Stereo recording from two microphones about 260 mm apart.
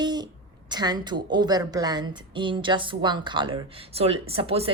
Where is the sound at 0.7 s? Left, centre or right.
Centre.